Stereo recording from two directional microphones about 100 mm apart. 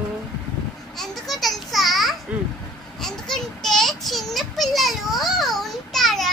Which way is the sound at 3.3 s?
5° left (ahead or behind).